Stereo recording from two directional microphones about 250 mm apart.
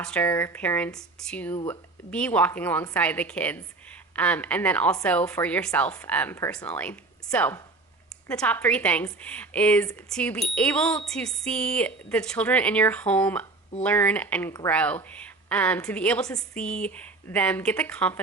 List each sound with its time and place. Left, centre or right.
0.0 s a woman's voice: centre